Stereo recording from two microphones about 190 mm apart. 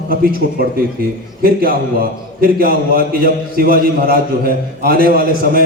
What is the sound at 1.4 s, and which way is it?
A man's voice, 50° right (ahead or behind).